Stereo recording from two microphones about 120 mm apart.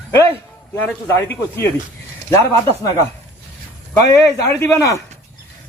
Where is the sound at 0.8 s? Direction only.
15° left (ahead or behind).